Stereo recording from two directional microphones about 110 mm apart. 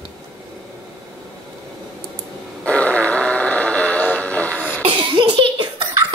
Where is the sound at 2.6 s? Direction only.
10° left (ahead or behind).